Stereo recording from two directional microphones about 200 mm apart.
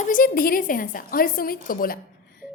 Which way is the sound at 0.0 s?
45° left (ahead or behind).